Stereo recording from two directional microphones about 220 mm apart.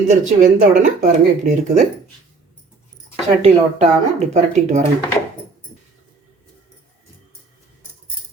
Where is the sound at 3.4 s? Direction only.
30° right (ahead or behind).